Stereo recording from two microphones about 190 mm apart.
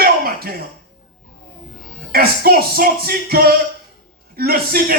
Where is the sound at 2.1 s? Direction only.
55° right (ahead or behind).